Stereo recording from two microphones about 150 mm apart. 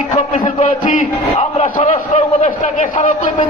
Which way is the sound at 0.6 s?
60° left (ahead or behind).